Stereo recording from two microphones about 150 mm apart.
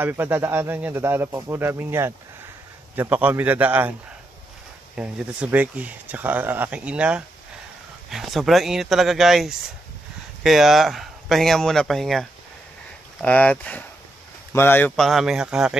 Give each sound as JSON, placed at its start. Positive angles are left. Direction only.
{"t": 0.0, "sound": "speech", "side_deg": -15}
{"t": 4.9, "sound": "speech", "side_deg": -10}
{"t": 15.0, "sound": "speech", "side_deg": 0}